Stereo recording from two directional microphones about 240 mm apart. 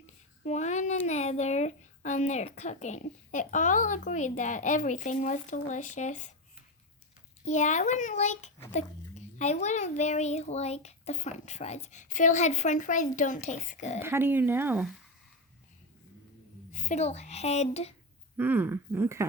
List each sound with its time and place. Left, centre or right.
0.4 s a child's voice: left
7.4 s a child's voice: left
14.0 s speech: centre
16.7 s a child's voice: left
18.3 s speech: centre